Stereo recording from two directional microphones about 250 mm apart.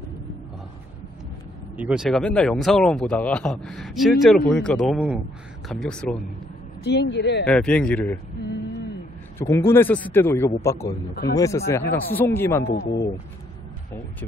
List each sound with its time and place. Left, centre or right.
1.8 s speech: centre
6.8 s speech: left
7.4 s speech: centre
9.4 s speech: centre
12.6 s speech: left